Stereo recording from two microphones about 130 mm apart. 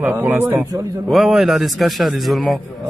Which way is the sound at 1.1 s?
5° right (ahead or behind).